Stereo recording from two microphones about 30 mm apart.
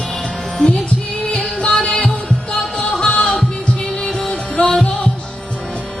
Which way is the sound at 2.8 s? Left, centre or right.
Left.